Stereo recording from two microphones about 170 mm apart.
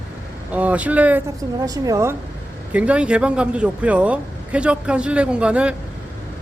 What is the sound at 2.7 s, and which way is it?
Speech, 5° right (ahead or behind).